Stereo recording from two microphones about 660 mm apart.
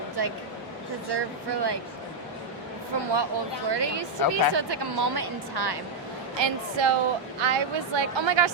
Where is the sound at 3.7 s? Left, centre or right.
Right.